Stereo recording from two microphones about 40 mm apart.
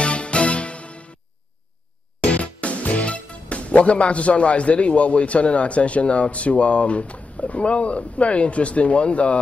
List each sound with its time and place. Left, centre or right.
0.0 s music: left
2.2 s speech: left